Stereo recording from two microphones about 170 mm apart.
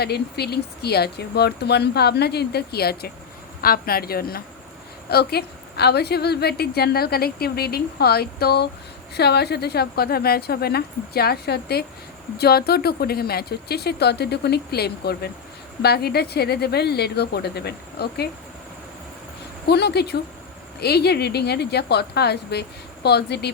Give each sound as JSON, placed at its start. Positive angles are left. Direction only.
{"t": 0.0, "sound": "a woman's voice", "side_deg": 70}
{"t": 19.6, "sound": "a woman's voice", "side_deg": 75}